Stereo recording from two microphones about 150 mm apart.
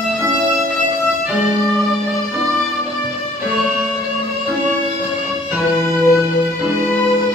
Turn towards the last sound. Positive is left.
turn(degrees=20)  # may be behind; listen again after turning